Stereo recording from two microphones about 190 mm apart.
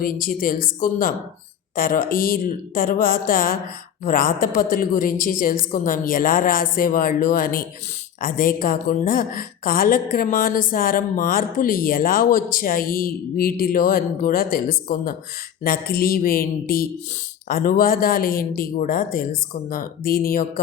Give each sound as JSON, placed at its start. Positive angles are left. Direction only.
{"t": 0.0, "sound": "a woman's voice", "side_deg": 50}